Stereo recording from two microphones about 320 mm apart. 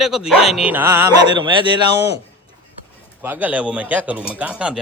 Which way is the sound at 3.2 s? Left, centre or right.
Centre.